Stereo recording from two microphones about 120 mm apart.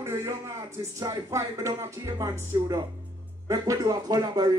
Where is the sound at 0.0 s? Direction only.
25° right (ahead or behind).